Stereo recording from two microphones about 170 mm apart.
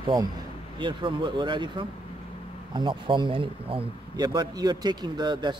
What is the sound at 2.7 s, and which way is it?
A man's voice, 25° right (ahead or behind).